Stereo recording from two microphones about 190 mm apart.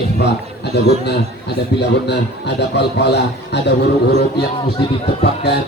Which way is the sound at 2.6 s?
60° left (ahead or behind).